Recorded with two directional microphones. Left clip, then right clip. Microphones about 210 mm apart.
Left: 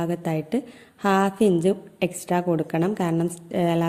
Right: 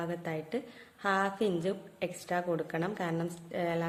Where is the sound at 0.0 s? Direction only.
30° left (ahead or behind).